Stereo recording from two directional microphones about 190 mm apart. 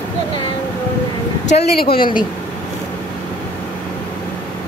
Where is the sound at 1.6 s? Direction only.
55° left (ahead or behind).